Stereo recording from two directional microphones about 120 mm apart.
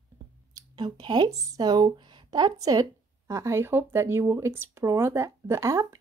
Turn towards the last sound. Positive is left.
turn(degrees=-25)  # may be behind; listen again after turning